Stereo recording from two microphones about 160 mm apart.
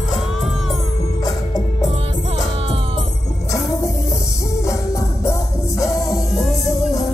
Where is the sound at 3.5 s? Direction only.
20° left (ahead or behind).